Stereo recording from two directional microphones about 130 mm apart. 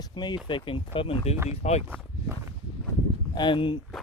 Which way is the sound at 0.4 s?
40° left (ahead or behind).